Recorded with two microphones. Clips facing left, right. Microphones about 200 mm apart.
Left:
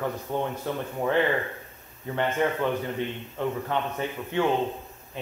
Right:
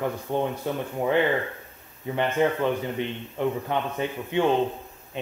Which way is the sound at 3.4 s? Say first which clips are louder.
Right 2 dB; 15° right (ahead or behind).